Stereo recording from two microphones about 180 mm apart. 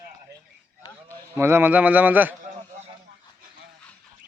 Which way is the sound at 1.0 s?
15° right (ahead or behind).